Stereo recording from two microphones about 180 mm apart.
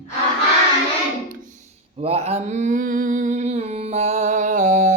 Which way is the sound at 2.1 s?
35° right (ahead or behind).